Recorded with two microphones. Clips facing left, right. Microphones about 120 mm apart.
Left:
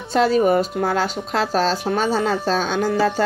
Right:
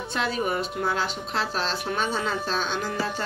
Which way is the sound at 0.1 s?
40° left (ahead or behind).